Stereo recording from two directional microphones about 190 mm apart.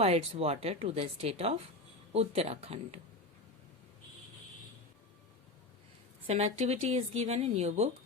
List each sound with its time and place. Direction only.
0.0 s speech: 30° right (ahead or behind)
6.2 s speech: 30° right (ahead or behind)